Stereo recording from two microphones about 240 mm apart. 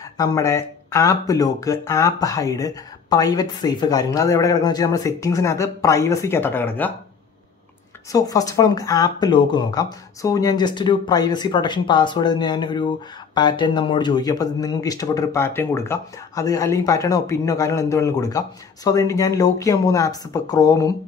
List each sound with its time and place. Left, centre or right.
0.2 s speech: centre
8.1 s speech: centre